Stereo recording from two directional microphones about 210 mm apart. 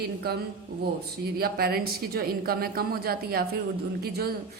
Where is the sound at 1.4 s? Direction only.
45° right (ahead or behind).